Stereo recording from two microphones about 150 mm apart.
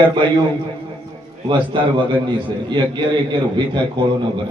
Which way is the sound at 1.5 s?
30° right (ahead or behind).